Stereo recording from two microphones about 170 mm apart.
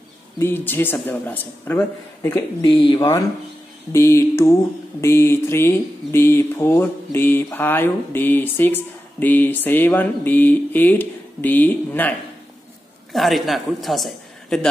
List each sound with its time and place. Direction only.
0.4 s speech: 15° left (ahead or behind)
13.1 s a man's voice: centre (ahead or behind)